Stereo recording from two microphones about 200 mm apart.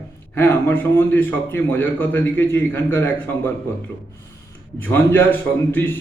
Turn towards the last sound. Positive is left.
turn(degrees=10)  # may be behind; listen again after turning